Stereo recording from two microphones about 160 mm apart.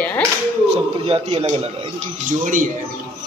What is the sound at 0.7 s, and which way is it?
Speech, 40° right (ahead or behind).